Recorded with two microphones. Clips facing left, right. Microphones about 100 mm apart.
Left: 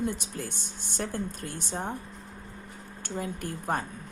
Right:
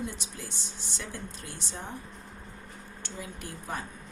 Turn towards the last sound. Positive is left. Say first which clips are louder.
# left 6 dB
turn(degrees=50)  # may be behind; listen again after turning